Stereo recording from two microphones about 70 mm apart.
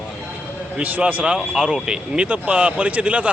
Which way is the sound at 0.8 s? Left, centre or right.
Centre.